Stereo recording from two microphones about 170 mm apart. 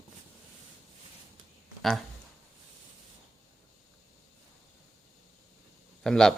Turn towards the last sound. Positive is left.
turn(degrees=5)  # may be behind; listen again after turning